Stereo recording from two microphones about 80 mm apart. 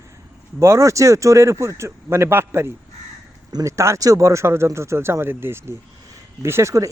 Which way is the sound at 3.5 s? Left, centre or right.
Right.